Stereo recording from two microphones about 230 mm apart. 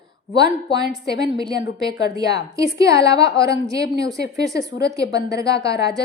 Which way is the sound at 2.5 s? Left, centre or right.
Centre.